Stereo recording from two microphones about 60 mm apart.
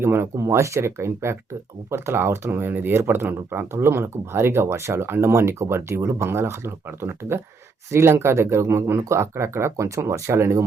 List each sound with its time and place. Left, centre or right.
0.0 s speech: right
0.4 s speech: right